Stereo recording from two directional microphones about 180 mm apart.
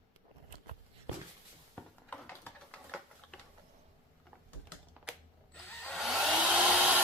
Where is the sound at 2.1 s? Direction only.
10° left (ahead or behind).